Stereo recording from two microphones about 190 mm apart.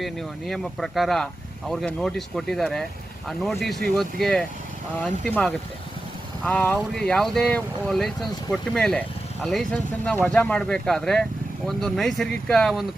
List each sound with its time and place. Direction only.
0.0 s speech: centre (ahead or behind)
3.9 s speech: centre (ahead or behind)